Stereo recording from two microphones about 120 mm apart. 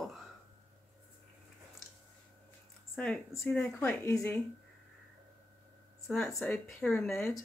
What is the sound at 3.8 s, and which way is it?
Speech, 20° left (ahead or behind).